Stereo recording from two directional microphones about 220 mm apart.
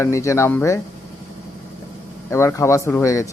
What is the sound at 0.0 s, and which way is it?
Speech, 15° left (ahead or behind).